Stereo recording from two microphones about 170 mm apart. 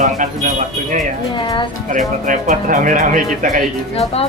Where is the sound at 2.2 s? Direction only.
50° right (ahead or behind).